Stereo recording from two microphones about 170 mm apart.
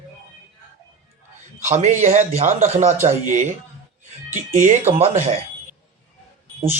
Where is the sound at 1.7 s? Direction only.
45° right (ahead or behind).